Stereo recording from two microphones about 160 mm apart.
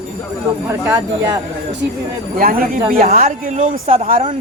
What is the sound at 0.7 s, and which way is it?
Speech, 15° right (ahead or behind).